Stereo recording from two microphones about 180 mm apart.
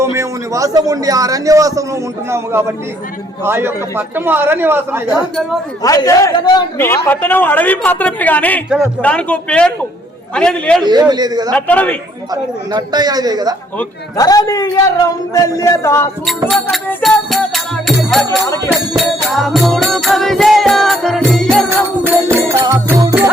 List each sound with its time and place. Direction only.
0.0 s a man's voice: 15° right (ahead or behind)
5.8 s a man's voice: 20° left (ahead or behind)
6.7 s a woman's voice: 10° left (ahead or behind)
10.3 s music: 5° left (ahead or behind)
10.8 s a man's voice: 25° right (ahead or behind)
11.5 s a woman's voice: 10° left (ahead or behind)
12.3 s a man's voice: 20° right (ahead or behind)
14.2 s a man's voice: 20° left (ahead or behind)
16.5 s music: centre (ahead or behind)
18.3 s a woman's voice: 20° left (ahead or behind)
18.7 s music: centre (ahead or behind)
22.4 s a man's voice: 10° right (ahead or behind)
23.0 s music: 20° right (ahead or behind)